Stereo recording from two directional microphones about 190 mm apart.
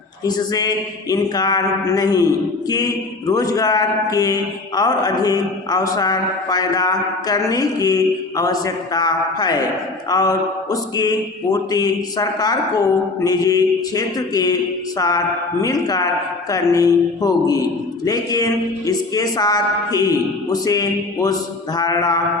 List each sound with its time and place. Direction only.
0.3 s mantra: 20° left (ahead or behind)